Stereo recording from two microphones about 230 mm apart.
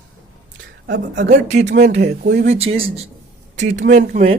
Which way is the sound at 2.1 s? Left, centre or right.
Right.